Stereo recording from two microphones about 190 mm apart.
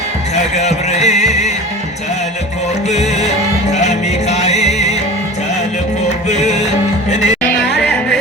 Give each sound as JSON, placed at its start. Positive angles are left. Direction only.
{"t": 0.5, "sound": "music", "side_deg": 35}
{"t": 2.9, "sound": "music", "side_deg": 35}
{"t": 6.2, "sound": "music", "side_deg": 35}